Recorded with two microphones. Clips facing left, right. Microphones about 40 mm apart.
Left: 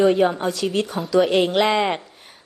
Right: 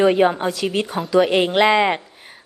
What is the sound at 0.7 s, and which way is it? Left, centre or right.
A woman's voice, centre.